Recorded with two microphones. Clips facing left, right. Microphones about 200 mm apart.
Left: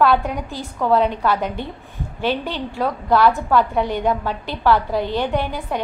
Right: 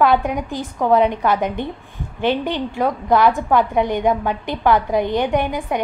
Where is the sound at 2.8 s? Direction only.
15° right (ahead or behind).